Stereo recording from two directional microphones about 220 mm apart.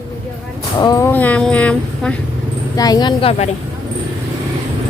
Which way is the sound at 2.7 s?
15° left (ahead or behind).